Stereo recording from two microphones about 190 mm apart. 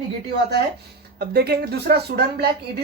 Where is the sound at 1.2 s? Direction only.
55° right (ahead or behind).